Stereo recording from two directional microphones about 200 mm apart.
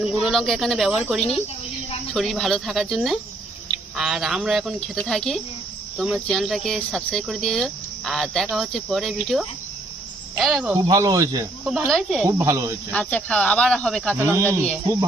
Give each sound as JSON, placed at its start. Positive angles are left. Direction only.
{"t": 0.0, "sound": "speech", "side_deg": 0}
{"t": 10.8, "sound": "speech", "side_deg": -20}
{"t": 11.6, "sound": "speech", "side_deg": -5}
{"t": 12.2, "sound": "speech", "side_deg": -15}
{"t": 12.9, "sound": "speech", "side_deg": 5}
{"t": 14.2, "sound": "speech", "side_deg": -10}